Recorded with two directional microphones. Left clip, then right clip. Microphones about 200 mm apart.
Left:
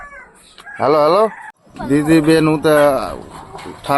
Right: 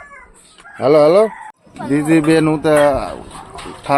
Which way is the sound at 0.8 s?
5° right (ahead or behind).